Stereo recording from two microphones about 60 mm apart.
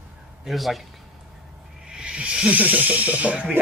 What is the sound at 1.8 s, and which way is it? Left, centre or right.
Speech, centre.